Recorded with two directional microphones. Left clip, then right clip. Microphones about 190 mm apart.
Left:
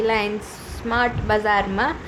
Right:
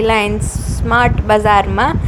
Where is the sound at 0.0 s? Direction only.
30° right (ahead or behind).